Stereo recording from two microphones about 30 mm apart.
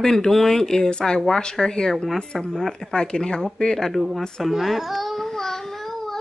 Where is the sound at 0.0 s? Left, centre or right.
Centre.